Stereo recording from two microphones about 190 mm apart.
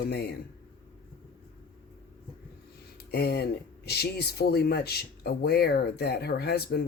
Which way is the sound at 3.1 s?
60° left (ahead or behind).